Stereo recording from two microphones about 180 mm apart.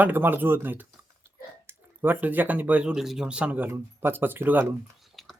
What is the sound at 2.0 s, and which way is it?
Speech, 10° right (ahead or behind).